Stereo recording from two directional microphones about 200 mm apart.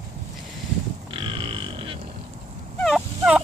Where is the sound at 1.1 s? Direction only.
25° right (ahead or behind).